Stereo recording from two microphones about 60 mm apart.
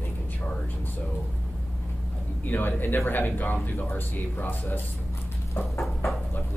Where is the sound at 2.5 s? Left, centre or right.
Left.